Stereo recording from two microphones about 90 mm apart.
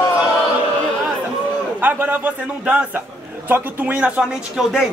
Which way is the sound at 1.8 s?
20° right (ahead or behind).